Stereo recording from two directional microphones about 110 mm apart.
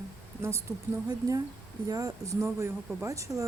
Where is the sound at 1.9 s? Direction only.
35° right (ahead or behind).